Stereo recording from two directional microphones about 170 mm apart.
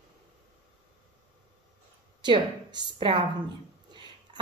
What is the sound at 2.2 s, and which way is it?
A woman's voice, 25° right (ahead or behind).